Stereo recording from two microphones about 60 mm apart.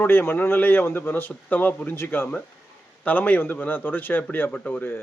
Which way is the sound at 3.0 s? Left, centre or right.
Left.